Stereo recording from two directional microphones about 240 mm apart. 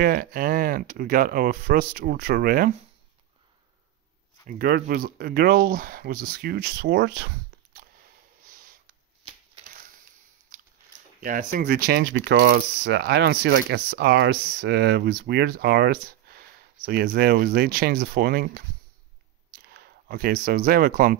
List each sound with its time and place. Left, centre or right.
0.0 s speech: right
4.5 s speech: right
8.5 s a sound: right
11.2 s speech: right